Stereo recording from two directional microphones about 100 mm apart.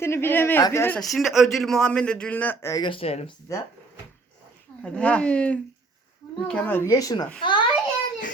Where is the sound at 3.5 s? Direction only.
35° left (ahead or behind).